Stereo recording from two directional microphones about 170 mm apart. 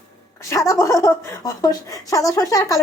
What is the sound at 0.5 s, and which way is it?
Speech, 20° left (ahead or behind).